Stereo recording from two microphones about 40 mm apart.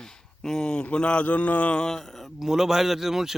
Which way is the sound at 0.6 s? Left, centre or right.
Left.